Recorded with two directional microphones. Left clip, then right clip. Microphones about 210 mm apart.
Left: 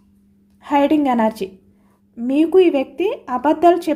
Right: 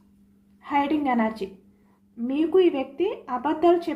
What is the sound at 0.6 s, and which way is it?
A woman's voice, 60° left (ahead or behind).